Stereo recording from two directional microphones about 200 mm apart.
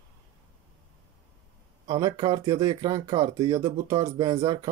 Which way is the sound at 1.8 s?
20° right (ahead or behind).